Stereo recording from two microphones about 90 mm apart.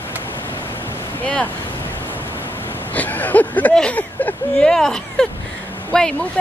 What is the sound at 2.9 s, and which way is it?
Speech, 20° left (ahead or behind).